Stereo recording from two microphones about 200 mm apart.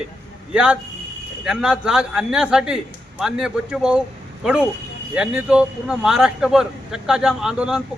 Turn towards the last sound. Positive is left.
turn(degrees=-5)  # may be behind; listen again after turning